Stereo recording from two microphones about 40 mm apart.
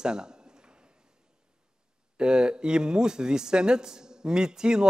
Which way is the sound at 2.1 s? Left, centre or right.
Right.